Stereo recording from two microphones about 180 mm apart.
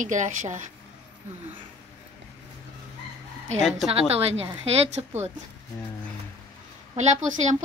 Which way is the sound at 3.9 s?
35° right (ahead or behind).